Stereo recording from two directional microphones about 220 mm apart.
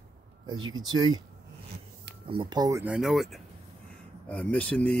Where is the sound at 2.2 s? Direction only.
20° right (ahead or behind).